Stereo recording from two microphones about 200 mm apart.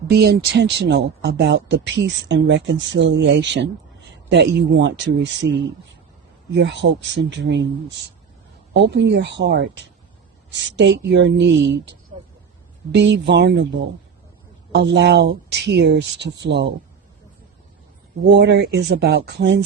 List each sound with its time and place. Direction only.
0.1 s speech: 55° right (ahead or behind)
12.9 s speech: 60° right (ahead or behind)
14.7 s speech: 60° right (ahead or behind)
18.3 s speech: 60° right (ahead or behind)